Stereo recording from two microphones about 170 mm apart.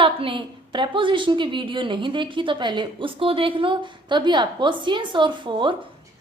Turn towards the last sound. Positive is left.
turn(degrees=-30)  # may be behind; listen again after turning